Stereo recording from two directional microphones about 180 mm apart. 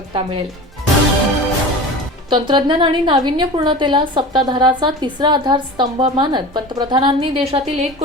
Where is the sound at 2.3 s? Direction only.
25° right (ahead or behind).